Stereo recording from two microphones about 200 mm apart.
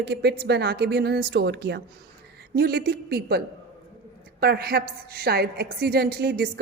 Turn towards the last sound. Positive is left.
turn(degrees=-50)  # may be behind; listen again after turning